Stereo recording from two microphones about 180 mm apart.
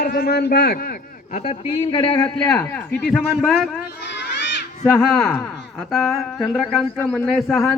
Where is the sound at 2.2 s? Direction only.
5° left (ahead or behind).